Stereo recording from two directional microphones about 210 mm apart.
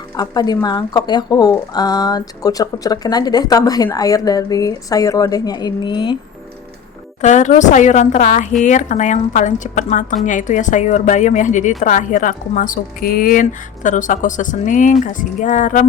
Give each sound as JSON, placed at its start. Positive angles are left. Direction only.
{"t": 0.2, "sound": "speech", "side_deg": 20}
{"t": 7.2, "sound": "speech", "side_deg": 35}